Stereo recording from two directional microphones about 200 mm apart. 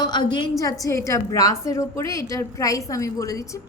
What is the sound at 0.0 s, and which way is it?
A woman's voice, 20° left (ahead or behind).